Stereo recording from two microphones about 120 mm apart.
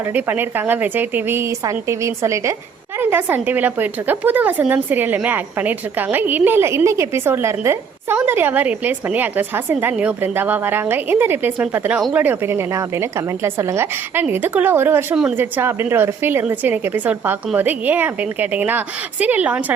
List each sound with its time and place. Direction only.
0.1 s a woman's voice: 15° right (ahead or behind)
15.1 s a woman's voice: 5° right (ahead or behind)
15.4 s a woman's voice: 20° right (ahead or behind)